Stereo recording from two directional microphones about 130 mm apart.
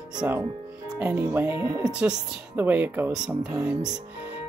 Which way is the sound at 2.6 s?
15° right (ahead or behind).